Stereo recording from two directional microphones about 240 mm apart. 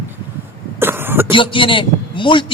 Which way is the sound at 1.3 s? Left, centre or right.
Left.